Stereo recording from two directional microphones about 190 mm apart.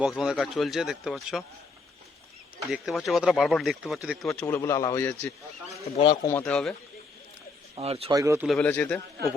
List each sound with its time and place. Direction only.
0.0 s speech: 5° right (ahead or behind)
2.6 s speech: centre (ahead or behind)
4.4 s a man's voice: 15° left (ahead or behind)
6.4 s speech: 5° left (ahead or behind)
7.8 s speech: 30° right (ahead or behind)
8.1 s speech: 15° right (ahead or behind)
8.4 s a man's voice: 5° left (ahead or behind)